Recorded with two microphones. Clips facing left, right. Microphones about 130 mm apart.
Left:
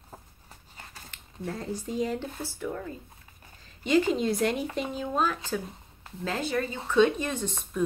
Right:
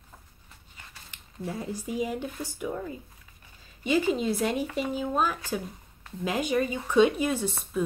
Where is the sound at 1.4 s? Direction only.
10° right (ahead or behind).